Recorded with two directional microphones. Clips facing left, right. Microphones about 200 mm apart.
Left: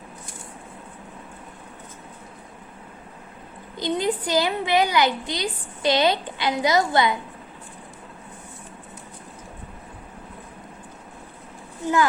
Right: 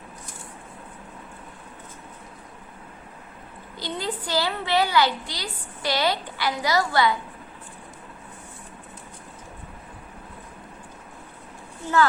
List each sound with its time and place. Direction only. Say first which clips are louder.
3.8 s a woman's voice: left 7 dB; 20° left (ahead or behind)